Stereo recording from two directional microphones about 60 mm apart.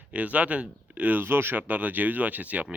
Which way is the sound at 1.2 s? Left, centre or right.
Right.